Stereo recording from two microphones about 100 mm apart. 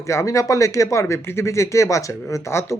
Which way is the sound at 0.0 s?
30° left (ahead or behind).